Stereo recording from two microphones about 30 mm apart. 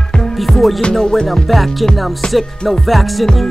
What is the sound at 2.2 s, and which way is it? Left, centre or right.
Music, left.